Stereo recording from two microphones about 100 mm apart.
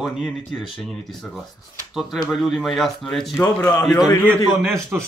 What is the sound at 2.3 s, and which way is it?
Speech, centre (ahead or behind).